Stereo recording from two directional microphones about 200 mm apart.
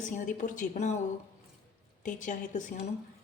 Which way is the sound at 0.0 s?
40° left (ahead or behind).